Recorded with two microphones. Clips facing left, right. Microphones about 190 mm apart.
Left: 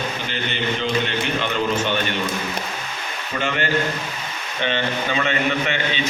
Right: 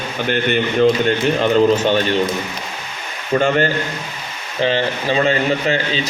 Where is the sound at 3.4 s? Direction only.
40° right (ahead or behind).